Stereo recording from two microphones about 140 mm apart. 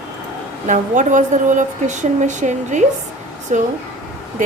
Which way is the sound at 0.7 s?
65° right (ahead or behind).